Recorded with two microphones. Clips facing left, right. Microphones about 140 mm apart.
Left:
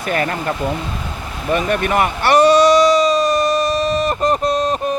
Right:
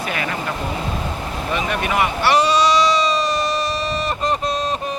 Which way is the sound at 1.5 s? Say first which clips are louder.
Left 6 dB; 50° left (ahead or behind).